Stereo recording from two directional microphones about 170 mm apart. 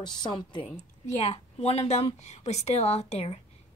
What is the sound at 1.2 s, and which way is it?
A woman's voice, 40° left (ahead or behind).